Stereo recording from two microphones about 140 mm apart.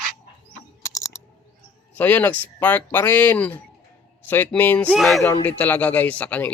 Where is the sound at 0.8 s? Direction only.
25° left (ahead or behind).